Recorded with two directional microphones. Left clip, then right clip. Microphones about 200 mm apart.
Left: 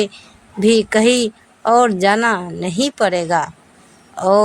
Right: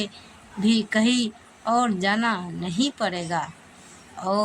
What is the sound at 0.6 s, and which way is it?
A woman's voice, 45° left (ahead or behind).